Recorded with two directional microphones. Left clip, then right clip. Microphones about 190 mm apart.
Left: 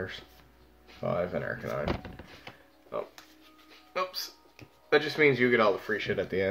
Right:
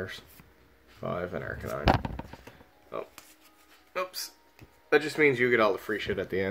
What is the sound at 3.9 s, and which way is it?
Music, 45° right (ahead or behind).